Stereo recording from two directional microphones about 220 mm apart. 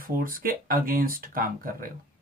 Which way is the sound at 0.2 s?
40° right (ahead or behind).